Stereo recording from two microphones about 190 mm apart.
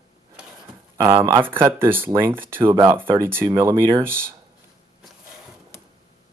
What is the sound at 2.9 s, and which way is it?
Speech, 10° right (ahead or behind).